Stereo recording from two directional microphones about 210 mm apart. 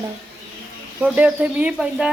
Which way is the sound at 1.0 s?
5° right (ahead or behind).